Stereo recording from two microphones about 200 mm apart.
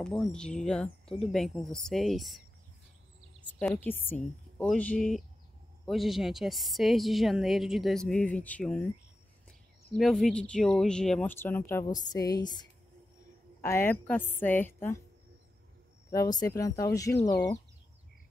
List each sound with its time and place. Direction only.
0.0 s a woman's voice: 5° left (ahead or behind)
3.5 s a woman's voice: centre (ahead or behind)
3.8 s a woman's voice: 10° left (ahead or behind)
9.9 s speech: centre (ahead or behind)
16.3 s speech: 20° left (ahead or behind)